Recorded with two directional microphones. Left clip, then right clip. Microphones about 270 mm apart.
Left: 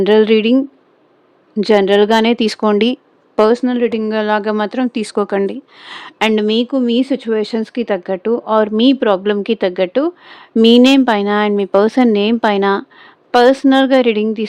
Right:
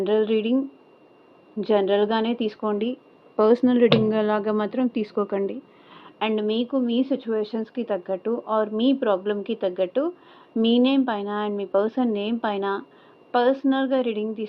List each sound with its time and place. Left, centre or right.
0.0 s a woman's voice: left
1.6 s a woman's voice: left
3.3 s speech: left
5.9 s a woman's voice: left